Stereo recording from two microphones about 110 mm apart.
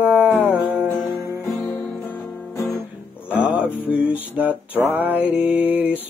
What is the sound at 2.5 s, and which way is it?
Guitar, 25° left (ahead or behind).